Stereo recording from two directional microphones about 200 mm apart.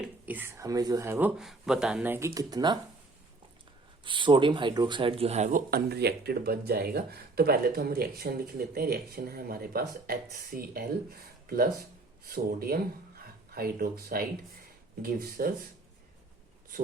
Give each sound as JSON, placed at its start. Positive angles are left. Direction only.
{"t": 0.0, "sound": "speech", "side_deg": -10}
{"t": 1.4, "sound": "speech", "side_deg": 0}
{"t": 4.0, "sound": "speech", "side_deg": -25}